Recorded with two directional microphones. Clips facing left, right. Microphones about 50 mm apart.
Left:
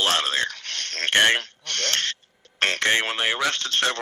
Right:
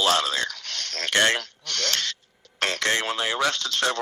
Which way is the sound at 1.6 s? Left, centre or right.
Left.